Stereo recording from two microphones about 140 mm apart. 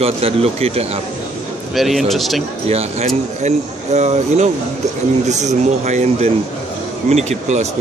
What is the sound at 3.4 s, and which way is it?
Speech, 55° right (ahead or behind).